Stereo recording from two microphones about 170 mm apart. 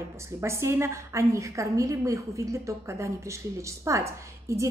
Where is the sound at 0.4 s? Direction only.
15° right (ahead or behind).